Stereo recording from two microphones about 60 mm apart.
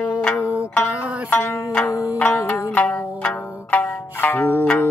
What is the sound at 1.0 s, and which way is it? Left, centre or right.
Zither, right.